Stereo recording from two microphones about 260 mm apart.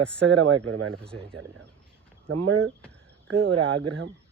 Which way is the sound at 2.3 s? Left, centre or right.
Right.